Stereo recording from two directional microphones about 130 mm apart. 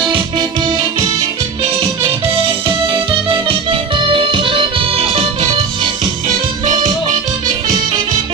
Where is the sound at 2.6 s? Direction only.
40° right (ahead or behind).